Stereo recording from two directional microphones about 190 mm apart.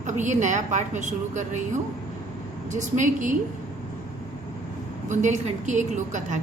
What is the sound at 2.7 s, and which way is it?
Speech, 40° right (ahead or behind).